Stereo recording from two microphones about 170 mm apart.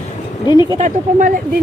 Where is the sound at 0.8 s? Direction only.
45° right (ahead or behind).